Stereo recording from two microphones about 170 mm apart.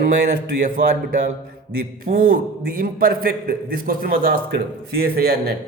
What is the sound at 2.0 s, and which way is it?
A man's voice, 55° right (ahead or behind).